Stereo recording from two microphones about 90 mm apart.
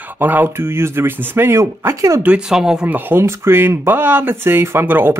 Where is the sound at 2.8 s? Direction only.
20° right (ahead or behind).